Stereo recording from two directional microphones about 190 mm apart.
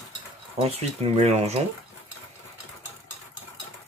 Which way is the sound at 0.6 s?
30° right (ahead or behind).